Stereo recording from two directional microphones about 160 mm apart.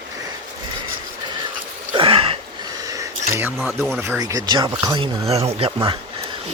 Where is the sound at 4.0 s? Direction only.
20° right (ahead or behind).